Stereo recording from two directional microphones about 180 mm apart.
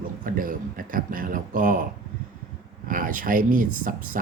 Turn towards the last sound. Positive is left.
turn(degrees=-50)  # may be behind; listen again after turning